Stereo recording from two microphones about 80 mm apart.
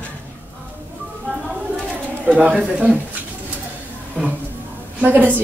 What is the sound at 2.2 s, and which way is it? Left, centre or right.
Speech, centre.